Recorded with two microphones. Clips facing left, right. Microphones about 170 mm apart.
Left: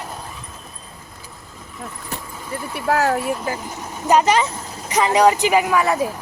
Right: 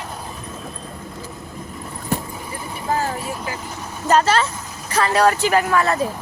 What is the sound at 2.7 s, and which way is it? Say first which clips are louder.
Speech: left 4 dB; 75° left (ahead or behind).